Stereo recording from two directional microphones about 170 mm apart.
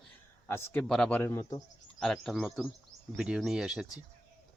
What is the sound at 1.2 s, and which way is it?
Speech, 15° left (ahead or behind).